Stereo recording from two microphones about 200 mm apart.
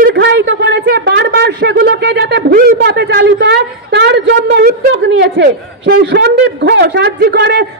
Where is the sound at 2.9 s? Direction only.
60° right (ahead or behind).